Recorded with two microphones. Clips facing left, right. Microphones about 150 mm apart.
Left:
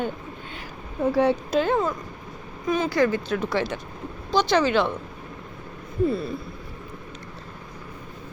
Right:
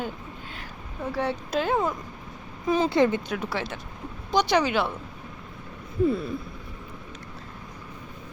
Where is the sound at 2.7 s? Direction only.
25° right (ahead or behind).